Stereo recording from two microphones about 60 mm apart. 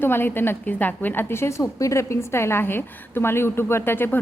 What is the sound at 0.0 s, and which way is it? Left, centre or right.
A woman's voice, left.